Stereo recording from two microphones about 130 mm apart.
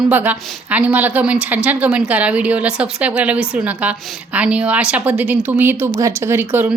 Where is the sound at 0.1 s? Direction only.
15° right (ahead or behind).